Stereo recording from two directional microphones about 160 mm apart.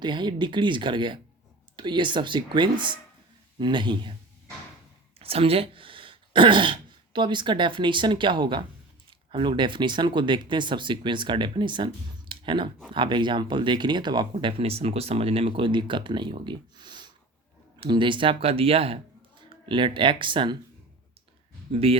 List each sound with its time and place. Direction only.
0.0 s speech: 30° right (ahead or behind)
5.2 s speech: 35° right (ahead or behind)
14.3 s speech: 40° right (ahead or behind)
21.7 s speech: 35° right (ahead or behind)